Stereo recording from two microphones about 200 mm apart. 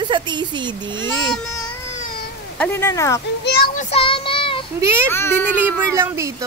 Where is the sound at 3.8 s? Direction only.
25° left (ahead or behind).